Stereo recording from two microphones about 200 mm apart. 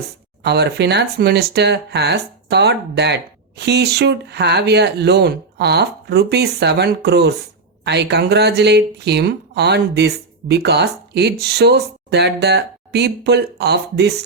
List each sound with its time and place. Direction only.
0.4 s speech: 55° right (ahead or behind)